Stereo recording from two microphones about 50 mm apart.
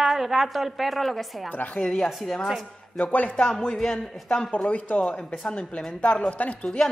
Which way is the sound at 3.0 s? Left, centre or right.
Left.